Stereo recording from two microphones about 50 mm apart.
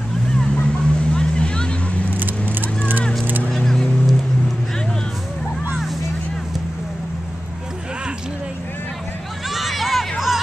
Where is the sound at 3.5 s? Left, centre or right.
Centre.